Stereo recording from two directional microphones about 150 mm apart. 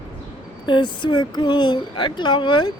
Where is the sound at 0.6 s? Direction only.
30° left (ahead or behind).